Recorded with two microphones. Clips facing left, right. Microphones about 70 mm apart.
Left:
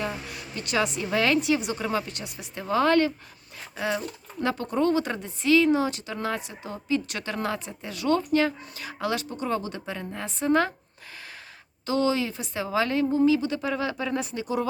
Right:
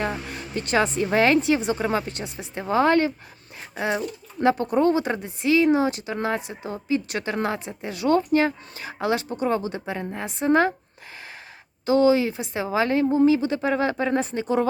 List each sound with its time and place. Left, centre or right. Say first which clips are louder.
0.0 s speech: right 4 dB; right
11.9 s speech: right 6 dB; right